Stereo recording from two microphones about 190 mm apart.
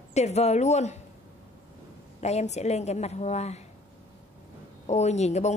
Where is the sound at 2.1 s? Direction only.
35° left (ahead or behind).